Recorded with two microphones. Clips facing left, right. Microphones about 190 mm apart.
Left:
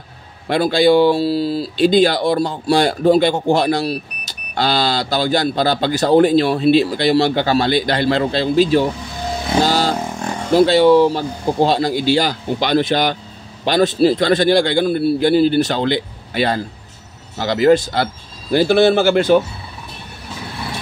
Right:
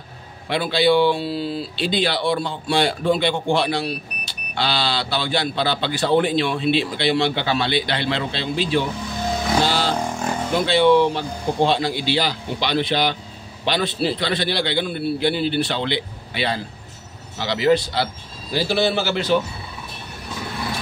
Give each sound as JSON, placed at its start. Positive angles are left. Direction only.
{"t": 0.5, "sound": "speech", "side_deg": 45}
{"t": 9.6, "sound": "vehicle", "side_deg": 40}
{"t": 10.5, "sound": "speech", "side_deg": 40}